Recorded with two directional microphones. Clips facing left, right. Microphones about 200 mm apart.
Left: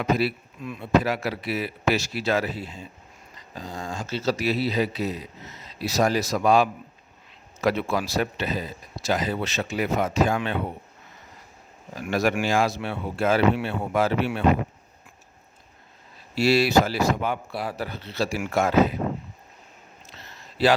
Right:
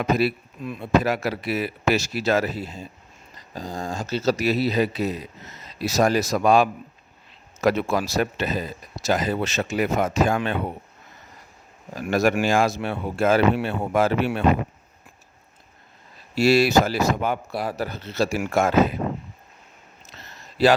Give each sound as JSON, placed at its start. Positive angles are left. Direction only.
{"t": 0.0, "sound": "speech", "side_deg": -45}
{"t": 11.9, "sound": "speech", "side_deg": -45}
{"t": 16.3, "sound": "speech", "side_deg": -45}